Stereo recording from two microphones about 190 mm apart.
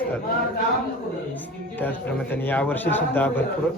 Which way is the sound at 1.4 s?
10° left (ahead or behind).